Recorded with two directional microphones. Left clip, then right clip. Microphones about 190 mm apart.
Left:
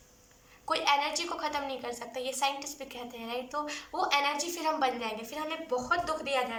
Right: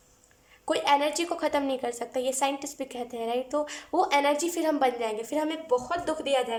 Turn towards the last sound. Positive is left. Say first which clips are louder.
# right 3 dB
turn(degrees=-40)  # may be behind; listen again after turning